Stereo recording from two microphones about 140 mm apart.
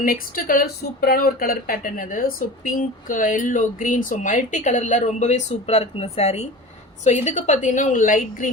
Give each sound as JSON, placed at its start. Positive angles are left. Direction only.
{"t": 0.0, "sound": "a woman's voice", "side_deg": 90}